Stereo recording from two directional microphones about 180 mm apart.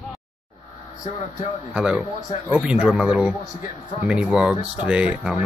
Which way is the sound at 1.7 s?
5° right (ahead or behind).